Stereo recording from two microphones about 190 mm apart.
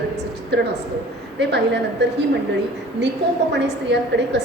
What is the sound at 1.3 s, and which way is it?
Speech, 65° right (ahead or behind).